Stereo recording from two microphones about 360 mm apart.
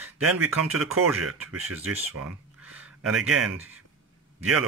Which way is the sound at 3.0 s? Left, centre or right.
Right.